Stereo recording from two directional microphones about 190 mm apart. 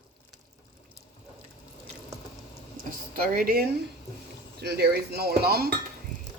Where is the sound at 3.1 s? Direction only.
50° right (ahead or behind).